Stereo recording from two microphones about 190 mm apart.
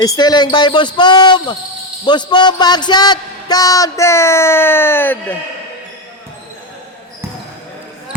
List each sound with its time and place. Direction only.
0.0 s a man's voice: 20° left (ahead or behind)